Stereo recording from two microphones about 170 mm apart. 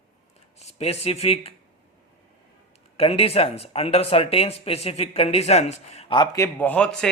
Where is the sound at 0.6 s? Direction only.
40° left (ahead or behind).